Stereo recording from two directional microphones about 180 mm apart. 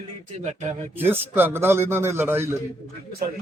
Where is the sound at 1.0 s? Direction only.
10° right (ahead or behind).